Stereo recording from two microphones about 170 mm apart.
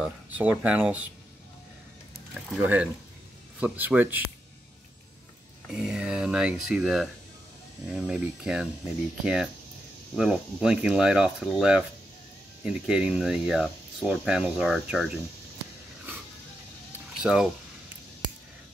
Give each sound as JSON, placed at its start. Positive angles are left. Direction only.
{"t": 0.0, "sound": "speech", "side_deg": -10}
{"t": 2.5, "sound": "speech", "side_deg": -10}
{"t": 5.7, "sound": "speech", "side_deg": -5}
{"t": 17.2, "sound": "speech", "side_deg": -5}